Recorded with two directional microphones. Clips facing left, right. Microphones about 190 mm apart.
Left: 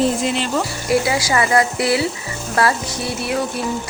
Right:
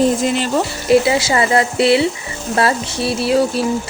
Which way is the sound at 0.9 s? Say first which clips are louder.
Right 5 dB; 25° right (ahead or behind).